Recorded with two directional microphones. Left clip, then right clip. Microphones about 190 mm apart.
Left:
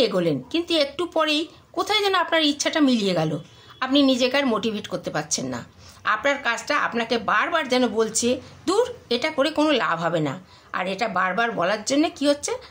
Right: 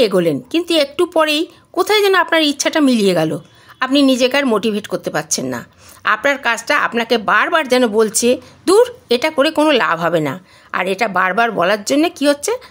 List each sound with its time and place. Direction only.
0.0 s a woman's voice: 40° right (ahead or behind)